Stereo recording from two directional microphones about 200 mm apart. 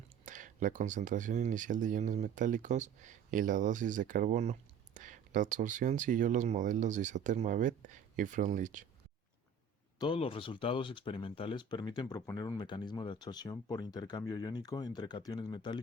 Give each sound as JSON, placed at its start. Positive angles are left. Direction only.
{"t": 0.3, "sound": "speech", "side_deg": -40}
{"t": 10.0, "sound": "speech", "side_deg": 25}